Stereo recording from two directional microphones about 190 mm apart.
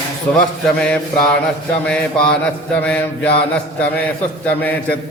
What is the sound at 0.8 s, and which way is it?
Speech, 5° left (ahead or behind).